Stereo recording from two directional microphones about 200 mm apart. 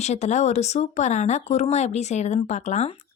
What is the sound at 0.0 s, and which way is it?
Speech, 35° left (ahead or behind).